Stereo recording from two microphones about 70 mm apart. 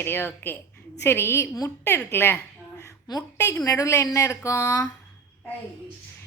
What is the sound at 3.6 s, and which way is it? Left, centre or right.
Speech, left.